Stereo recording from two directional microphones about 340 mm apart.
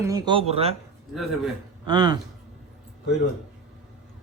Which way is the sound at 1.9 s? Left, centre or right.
Centre.